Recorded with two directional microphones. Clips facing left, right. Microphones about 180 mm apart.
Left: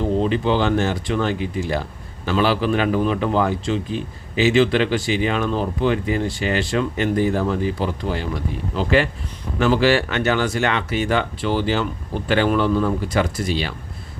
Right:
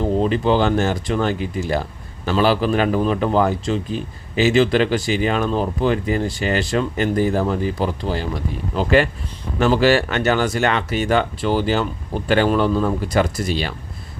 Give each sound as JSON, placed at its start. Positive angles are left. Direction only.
{"t": 0.2, "sound": "speech", "side_deg": -40}